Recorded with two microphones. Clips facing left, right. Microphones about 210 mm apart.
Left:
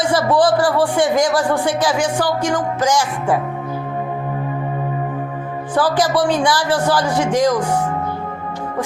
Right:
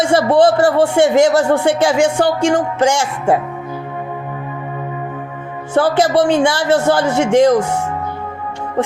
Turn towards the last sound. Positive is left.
turn(degrees=-25)  # may be behind; listen again after turning